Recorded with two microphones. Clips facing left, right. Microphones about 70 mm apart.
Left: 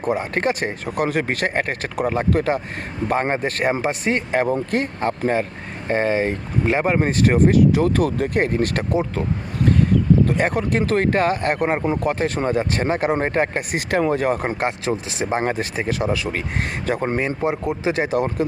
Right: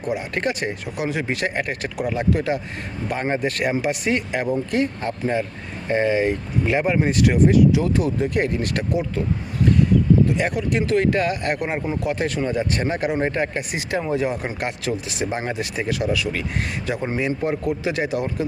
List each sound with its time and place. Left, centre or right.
0.0 s speech: left
0.9 s speech: left
6.8 s speech: left
10.2 s speech: left
14.6 s speech: left
17.4 s speech: left